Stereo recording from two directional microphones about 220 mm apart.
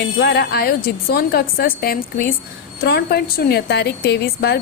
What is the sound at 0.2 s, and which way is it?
A woman's voice, 45° left (ahead or behind).